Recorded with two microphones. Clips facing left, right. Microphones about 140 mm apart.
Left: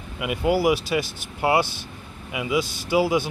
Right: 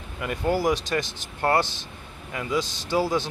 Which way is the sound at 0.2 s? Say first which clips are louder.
Left 3 dB; 10° left (ahead or behind).